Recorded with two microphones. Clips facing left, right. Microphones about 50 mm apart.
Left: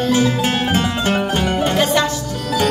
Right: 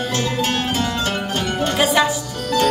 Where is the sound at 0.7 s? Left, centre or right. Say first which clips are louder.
Left 4 dB; left.